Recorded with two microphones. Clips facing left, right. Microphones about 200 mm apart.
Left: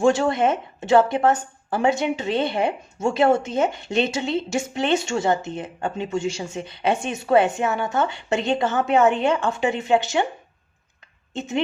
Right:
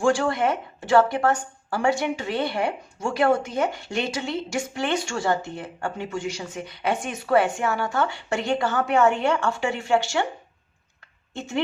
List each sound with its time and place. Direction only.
0.0 s a woman's voice: 20° left (ahead or behind)
11.3 s a woman's voice: 20° left (ahead or behind)